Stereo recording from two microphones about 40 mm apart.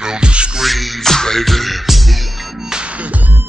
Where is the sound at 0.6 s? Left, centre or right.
Centre.